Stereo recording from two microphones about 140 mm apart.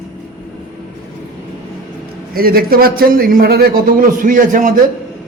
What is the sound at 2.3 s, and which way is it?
A man's voice, 90° right.